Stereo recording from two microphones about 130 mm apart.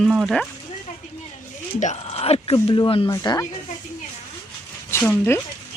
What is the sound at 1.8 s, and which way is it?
Speech, 60° left (ahead or behind).